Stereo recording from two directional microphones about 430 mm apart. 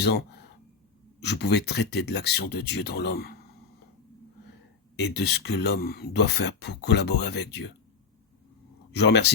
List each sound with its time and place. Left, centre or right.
0.0 s speech: left
4.9 s speech: left
8.9 s speech: left